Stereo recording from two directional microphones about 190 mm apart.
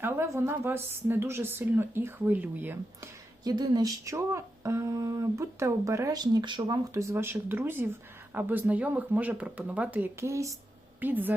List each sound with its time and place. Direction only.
0.0 s speech: 10° right (ahead or behind)
3.4 s speech: 20° right (ahead or behind)